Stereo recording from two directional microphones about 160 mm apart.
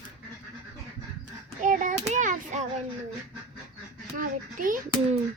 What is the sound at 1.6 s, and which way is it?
A child's voice, 55° right (ahead or behind).